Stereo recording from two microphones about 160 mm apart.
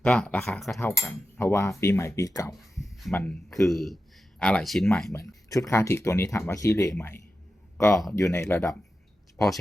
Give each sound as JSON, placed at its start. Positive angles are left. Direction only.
{"t": 0.0, "sound": "speech", "side_deg": 10}
{"t": 1.4, "sound": "speech", "side_deg": 15}
{"t": 2.7, "sound": "a sound", "side_deg": 0}
{"t": 3.1, "sound": "speech", "side_deg": 10}
{"t": 5.5, "sound": "speech", "side_deg": 20}